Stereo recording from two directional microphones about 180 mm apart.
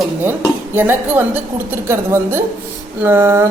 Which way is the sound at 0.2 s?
10° right (ahead or behind).